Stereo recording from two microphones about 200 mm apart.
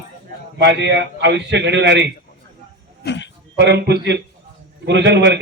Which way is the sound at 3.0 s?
60° left (ahead or behind).